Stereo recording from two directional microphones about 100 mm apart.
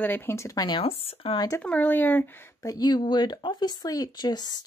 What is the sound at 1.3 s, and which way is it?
Speech, 30° left (ahead or behind).